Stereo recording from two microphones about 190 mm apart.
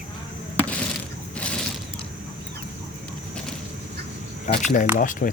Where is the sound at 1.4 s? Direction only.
5° left (ahead or behind).